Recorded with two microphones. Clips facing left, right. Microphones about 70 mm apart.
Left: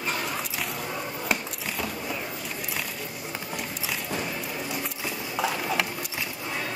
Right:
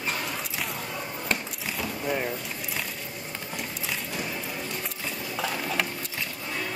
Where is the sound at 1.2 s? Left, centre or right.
Centre.